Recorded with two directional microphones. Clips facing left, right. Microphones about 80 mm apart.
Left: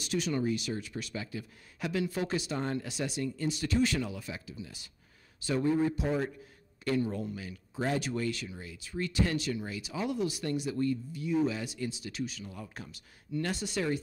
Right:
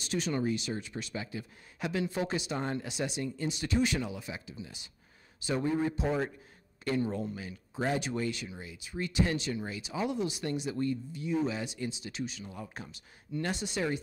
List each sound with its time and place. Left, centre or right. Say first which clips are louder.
0.0 s speech: even; right